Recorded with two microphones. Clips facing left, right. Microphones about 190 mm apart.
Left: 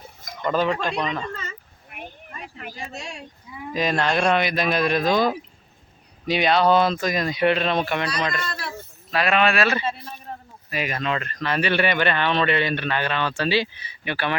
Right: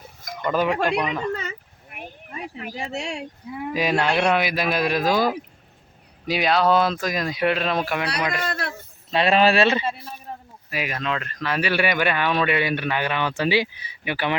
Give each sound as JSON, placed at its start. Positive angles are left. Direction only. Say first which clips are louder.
{"t": 0.4, "sound": "speech", "louder": "right 1 dB", "side_deg": -10}
{"t": 1.3, "sound": "a sound", "louder": "right 6 dB", "side_deg": -70}
{"t": 2.7, "sound": "speech", "louder": "right 8 dB", "side_deg": -70}
{"t": 3.8, "sound": "speech", "louder": "even", "side_deg": -10}
{"t": 8.4, "sound": "a sound", "louder": "right 4 dB", "side_deg": -60}
{"t": 9.0, "sound": "speech", "louder": "right 3 dB", "side_deg": -25}
{"t": 10.7, "sound": "speech", "louder": "left 1 dB", "side_deg": -5}